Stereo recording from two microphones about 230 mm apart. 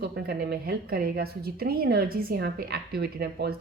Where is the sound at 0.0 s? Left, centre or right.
Right.